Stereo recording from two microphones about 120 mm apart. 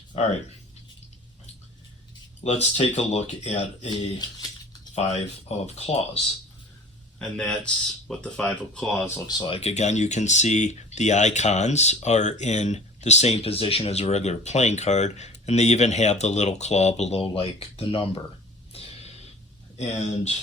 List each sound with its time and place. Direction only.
2.4 s speech: 65° left (ahead or behind)
4.9 s speech: 65° left (ahead or behind)
7.2 s speech: 5° left (ahead or behind)
9.5 s speech: 60° left (ahead or behind)
18.7 s a sound: 55° left (ahead or behind)
19.7 s speech: 70° left (ahead or behind)